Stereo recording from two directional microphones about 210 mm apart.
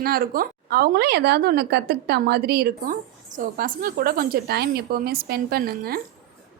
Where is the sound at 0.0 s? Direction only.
45° right (ahead or behind).